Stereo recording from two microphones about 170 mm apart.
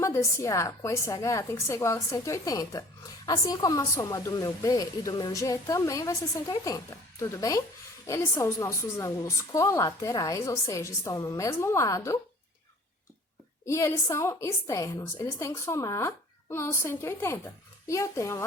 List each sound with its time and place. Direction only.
0.0 s a woman's voice: 20° left (ahead or behind)
13.7 s a woman's voice: 20° left (ahead or behind)